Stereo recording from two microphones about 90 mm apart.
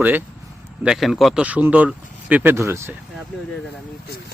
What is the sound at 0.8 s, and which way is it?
Speech, 5° right (ahead or behind).